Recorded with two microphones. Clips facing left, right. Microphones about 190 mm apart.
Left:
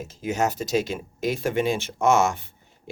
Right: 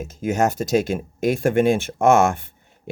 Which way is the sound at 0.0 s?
50° right (ahead or behind).